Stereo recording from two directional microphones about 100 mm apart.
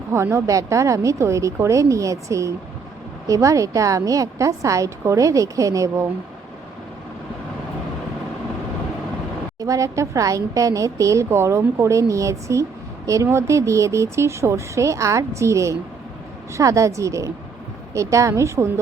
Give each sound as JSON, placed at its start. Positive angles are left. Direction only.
{"t": 0.1, "sound": "a woman's voice", "side_deg": -25}
{"t": 9.6, "sound": "a woman's voice", "side_deg": -35}